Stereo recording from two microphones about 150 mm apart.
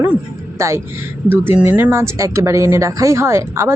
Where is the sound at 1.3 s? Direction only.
15° right (ahead or behind).